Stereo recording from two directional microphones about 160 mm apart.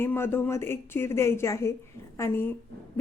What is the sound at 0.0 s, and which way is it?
A woman's voice, 15° left (ahead or behind).